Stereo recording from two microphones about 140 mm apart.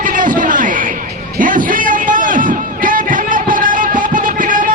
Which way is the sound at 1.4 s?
70° right (ahead or behind).